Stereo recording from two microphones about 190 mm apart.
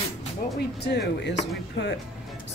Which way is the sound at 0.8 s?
60° left (ahead or behind).